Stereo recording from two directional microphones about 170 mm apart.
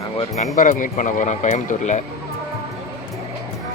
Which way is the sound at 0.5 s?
50° left (ahead or behind).